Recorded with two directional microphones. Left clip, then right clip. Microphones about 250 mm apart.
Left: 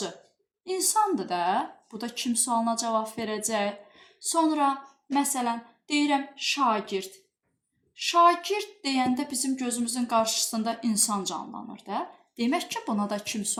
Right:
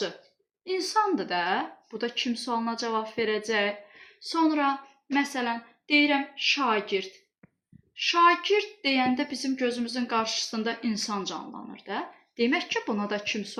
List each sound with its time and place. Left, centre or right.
0.6 s speech: left